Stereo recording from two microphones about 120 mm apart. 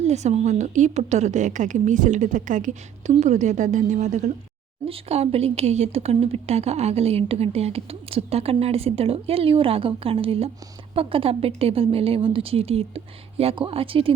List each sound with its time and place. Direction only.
0.0 s a woman's voice: 65° right (ahead or behind)
4.9 s a woman's voice: 60° right (ahead or behind)